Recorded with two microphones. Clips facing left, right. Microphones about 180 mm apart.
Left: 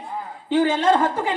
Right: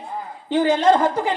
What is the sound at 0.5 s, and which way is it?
Speech, 40° right (ahead or behind).